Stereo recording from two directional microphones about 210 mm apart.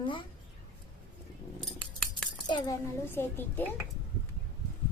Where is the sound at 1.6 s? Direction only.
Centre (ahead or behind).